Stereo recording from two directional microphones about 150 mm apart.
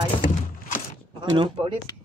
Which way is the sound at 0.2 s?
60° left (ahead or behind).